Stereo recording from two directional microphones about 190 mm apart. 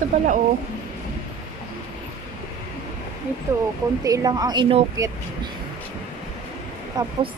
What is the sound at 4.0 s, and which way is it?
Speech, 20° right (ahead or behind).